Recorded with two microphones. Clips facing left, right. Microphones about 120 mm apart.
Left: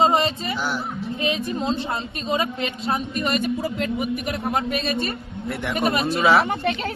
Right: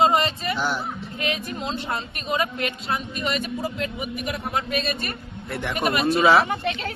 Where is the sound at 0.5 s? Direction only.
Centre (ahead or behind).